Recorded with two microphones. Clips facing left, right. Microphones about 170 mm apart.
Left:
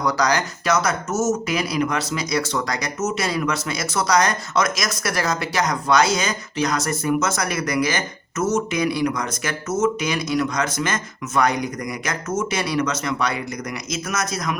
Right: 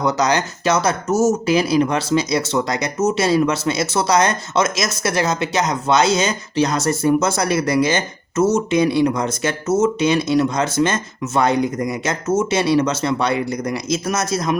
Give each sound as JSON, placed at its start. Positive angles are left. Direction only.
{"t": 0.0, "sound": "speech", "side_deg": -25}